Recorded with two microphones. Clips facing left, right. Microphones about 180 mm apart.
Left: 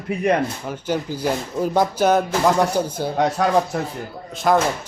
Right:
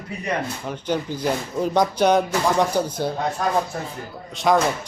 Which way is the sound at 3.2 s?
80° left.